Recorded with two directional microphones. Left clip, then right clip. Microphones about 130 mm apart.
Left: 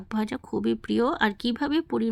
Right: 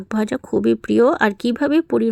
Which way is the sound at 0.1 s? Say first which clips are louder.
Right 9 dB; 40° right (ahead or behind).